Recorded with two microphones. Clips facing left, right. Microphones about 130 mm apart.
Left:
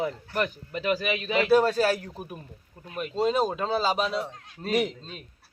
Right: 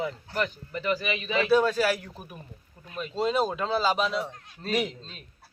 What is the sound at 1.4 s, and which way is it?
Speech, 40° left (ahead or behind).